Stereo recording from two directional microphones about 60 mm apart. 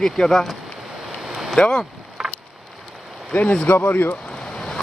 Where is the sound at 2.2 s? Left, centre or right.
Centre.